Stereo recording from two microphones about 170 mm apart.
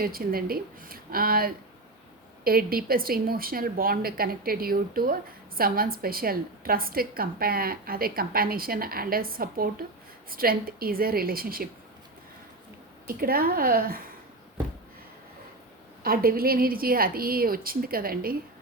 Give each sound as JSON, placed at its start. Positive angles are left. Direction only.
{"t": 0.0, "sound": "a woman's voice", "side_deg": -60}
{"t": 13.1, "sound": "a woman's voice", "side_deg": -60}
{"t": 16.0, "sound": "a woman's voice", "side_deg": -60}